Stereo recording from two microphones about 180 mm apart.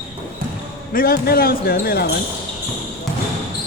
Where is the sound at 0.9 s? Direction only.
55° left (ahead or behind).